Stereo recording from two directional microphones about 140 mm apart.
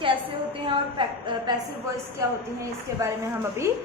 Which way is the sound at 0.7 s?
35° right (ahead or behind).